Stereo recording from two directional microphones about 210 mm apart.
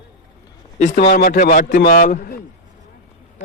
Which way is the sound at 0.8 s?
35° left (ahead or behind).